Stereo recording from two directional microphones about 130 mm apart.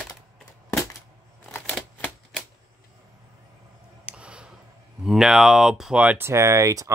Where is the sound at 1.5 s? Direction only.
10° left (ahead or behind).